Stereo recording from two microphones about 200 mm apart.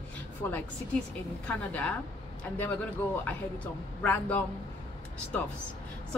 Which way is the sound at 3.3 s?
5° left (ahead or behind).